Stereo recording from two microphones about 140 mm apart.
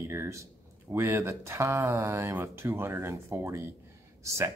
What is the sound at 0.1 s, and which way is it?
Speech, 20° right (ahead or behind).